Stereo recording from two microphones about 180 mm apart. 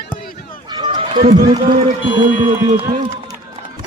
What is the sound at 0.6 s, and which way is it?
Run, 25° right (ahead or behind).